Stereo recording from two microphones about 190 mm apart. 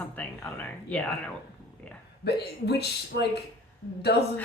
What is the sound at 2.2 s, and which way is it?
Speech, 60° left (ahead or behind).